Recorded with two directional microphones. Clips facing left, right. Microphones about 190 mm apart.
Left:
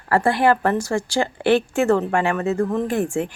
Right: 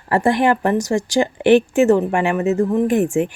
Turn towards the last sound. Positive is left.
turn(degrees=-20)  # may be behind; listen again after turning